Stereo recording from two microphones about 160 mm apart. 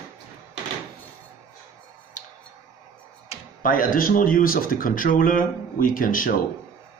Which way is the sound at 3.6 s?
60° left (ahead or behind).